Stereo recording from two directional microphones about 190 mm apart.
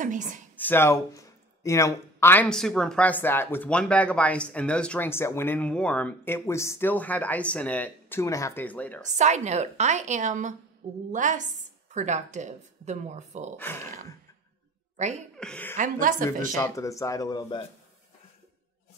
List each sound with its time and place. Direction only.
0.0 s a woman's voice: 40° right (ahead or behind)
0.6 s speech: 10° left (ahead or behind)
9.2 s a woman's voice: 35° right (ahead or behind)
13.6 s speech: 10° left (ahead or behind)
15.3 s a woman's voice: 5° left (ahead or behind)
15.8 s speech: 45° right (ahead or behind)
16.5 s speech: 15° left (ahead or behind)